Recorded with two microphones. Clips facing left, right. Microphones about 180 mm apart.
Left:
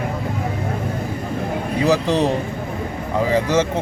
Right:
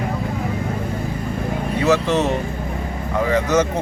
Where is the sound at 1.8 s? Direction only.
35° left (ahead or behind).